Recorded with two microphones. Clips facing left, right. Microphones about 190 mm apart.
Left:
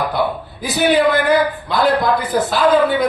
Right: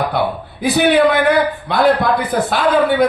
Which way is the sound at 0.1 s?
60° right (ahead or behind).